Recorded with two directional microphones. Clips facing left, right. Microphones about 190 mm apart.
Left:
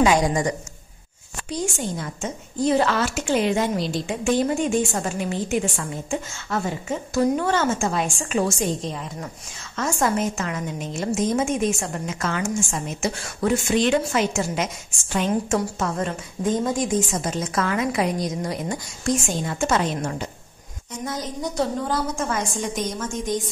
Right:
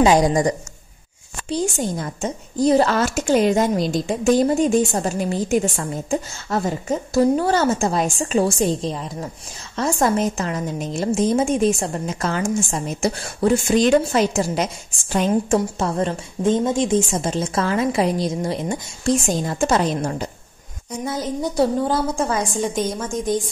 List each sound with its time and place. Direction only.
0.0 s a woman's voice: 35° right (ahead or behind)
21.4 s a woman's voice: 30° right (ahead or behind)